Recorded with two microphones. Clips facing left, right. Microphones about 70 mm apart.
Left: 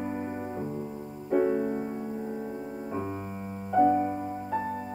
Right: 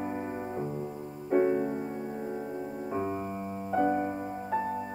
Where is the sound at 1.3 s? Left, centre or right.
Centre.